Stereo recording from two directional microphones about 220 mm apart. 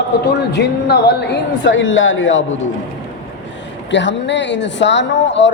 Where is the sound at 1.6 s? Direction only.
60° left (ahead or behind).